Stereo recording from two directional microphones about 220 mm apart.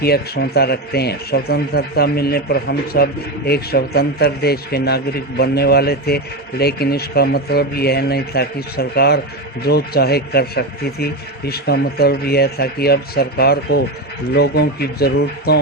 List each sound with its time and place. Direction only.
0.0 s a man's voice: 45° left (ahead or behind)